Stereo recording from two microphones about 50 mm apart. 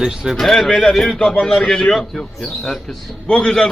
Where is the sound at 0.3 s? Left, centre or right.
Centre.